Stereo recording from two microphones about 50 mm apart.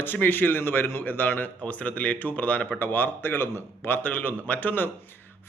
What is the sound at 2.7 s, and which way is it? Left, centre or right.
A man's voice, left.